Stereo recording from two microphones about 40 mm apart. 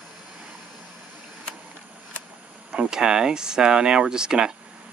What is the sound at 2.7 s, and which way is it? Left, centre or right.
Speech, centre.